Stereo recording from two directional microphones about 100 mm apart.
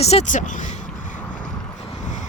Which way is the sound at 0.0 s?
90° left.